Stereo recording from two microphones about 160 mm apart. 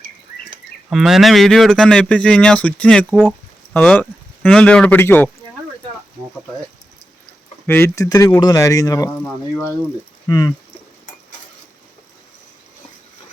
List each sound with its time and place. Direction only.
0.9 s speech: centre (ahead or behind)
3.2 s a sound: 5° right (ahead or behind)
3.8 s speech: 10° left (ahead or behind)
7.7 s speech: 15° left (ahead or behind)